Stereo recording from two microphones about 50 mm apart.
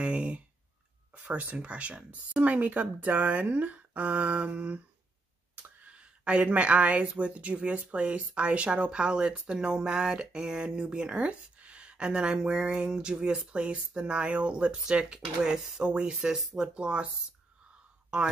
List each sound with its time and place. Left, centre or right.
0.0 s clicking: right
1.1 s speech: right
18.1 s speech: centre